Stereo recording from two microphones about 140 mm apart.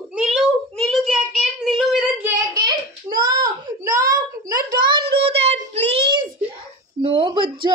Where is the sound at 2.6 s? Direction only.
30° right (ahead or behind).